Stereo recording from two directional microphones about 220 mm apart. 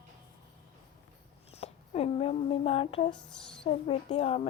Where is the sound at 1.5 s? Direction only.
30° left (ahead or behind).